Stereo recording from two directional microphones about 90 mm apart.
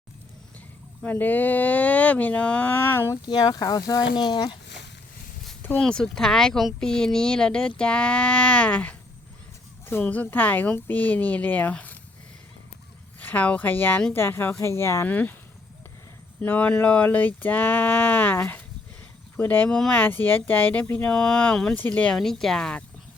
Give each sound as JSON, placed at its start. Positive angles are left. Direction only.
{"t": 1.0, "sound": "speech", "side_deg": 20}
{"t": 3.2, "sound": "speech", "side_deg": 55}
{"t": 4.1, "sound": "speech", "side_deg": 60}
{"t": 5.7, "sound": "speech", "side_deg": 5}
{"t": 13.1, "sound": "speech", "side_deg": 15}
{"t": 15.0, "sound": "speech", "side_deg": 20}
{"t": 16.4, "sound": "a sound", "side_deg": 15}
{"t": 19.4, "sound": "speech", "side_deg": 20}
{"t": 22.1, "sound": "speech", "side_deg": 5}